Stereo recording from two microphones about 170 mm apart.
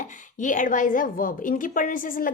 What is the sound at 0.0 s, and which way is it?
A woman's voice, 50° left (ahead or behind).